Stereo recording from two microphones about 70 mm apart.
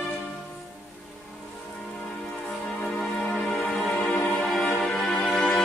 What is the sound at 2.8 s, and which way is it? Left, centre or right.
Music, centre.